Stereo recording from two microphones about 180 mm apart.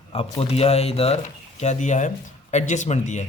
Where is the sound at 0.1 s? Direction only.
30° left (ahead or behind).